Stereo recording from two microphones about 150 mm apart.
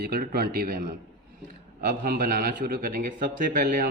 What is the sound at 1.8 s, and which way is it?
A man's voice, 75° right (ahead or behind).